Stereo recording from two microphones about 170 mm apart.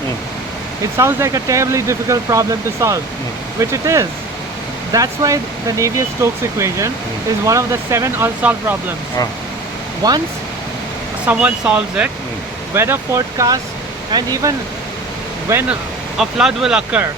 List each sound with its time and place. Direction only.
0.9 s speech: 15° right (ahead or behind)
10.0 s speech: 20° right (ahead or behind)
11.3 s speech: 5° right (ahead or behind)
16.1 s speech: centre (ahead or behind)